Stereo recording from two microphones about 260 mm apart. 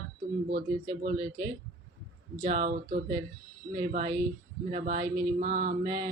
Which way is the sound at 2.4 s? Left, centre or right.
Right.